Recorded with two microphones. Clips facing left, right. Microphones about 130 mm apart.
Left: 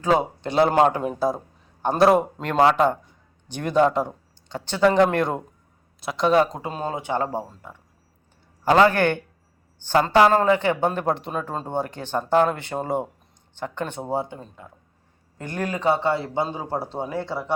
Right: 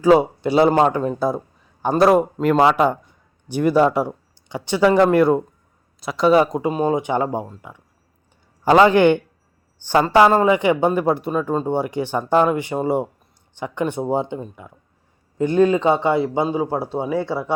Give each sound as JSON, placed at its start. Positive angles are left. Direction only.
{"t": 0.0, "sound": "a man's voice", "side_deg": -5}